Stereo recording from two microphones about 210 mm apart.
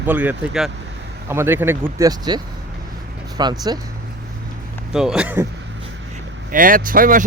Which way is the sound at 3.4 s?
20° right (ahead or behind).